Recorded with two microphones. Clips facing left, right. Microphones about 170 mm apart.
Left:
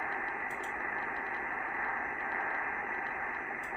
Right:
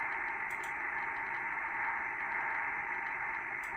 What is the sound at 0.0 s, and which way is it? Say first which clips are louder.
Radio: left 4 dB; 55° left (ahead or behind).